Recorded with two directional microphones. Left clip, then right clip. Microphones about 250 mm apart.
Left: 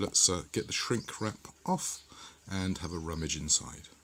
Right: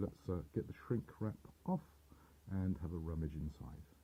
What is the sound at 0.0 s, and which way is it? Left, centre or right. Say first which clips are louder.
Speech: left 15 dB; left.